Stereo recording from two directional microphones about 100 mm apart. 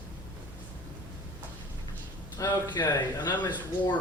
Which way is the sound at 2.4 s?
35° left (ahead or behind).